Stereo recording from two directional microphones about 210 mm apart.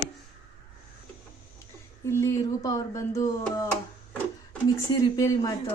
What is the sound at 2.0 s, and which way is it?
Speech, 15° left (ahead or behind).